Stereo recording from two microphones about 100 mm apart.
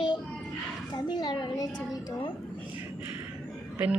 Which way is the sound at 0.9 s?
45° left (ahead or behind).